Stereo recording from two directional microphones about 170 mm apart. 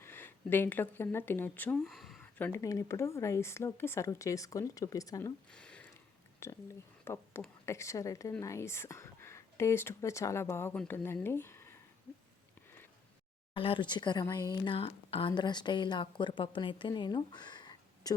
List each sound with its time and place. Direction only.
0.0 s speech: 15° left (ahead or behind)
5.5 s a sound: 5° left (ahead or behind)
6.4 s speech: 15° left (ahead or behind)
13.5 s speech: 30° left (ahead or behind)